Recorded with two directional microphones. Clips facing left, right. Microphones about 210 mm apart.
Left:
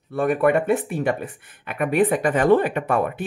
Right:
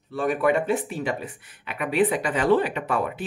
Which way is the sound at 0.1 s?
55° left (ahead or behind).